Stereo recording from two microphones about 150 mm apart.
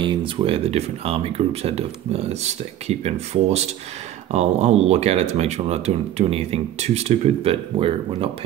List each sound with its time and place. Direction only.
0.0 s speech: 35° right (ahead or behind)